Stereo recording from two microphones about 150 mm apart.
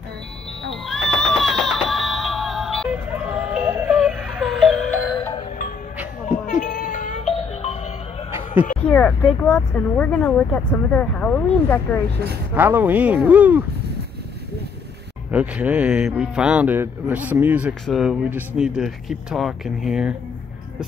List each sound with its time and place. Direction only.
0.8 s music: 5° left (ahead or behind)
3.5 s music: 10° right (ahead or behind); by 5.0 s 5° left (ahead or behind)
5.1 s music: 25° left (ahead or behind)
6.6 s music: 65° left (ahead or behind); by 7.7 s 45° left (ahead or behind)
8.8 s speech: 10° left (ahead or behind)
12.5 s speech: 10° right (ahead or behind)
15.3 s speech: 10° right (ahead or behind)
17.8 s speech: centre (ahead or behind)